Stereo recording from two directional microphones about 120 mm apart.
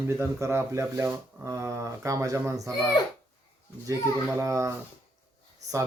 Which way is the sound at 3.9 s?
25° right (ahead or behind).